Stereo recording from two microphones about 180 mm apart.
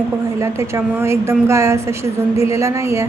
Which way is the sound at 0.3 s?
15° right (ahead or behind).